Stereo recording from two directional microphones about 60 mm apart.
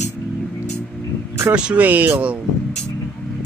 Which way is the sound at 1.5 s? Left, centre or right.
Centre.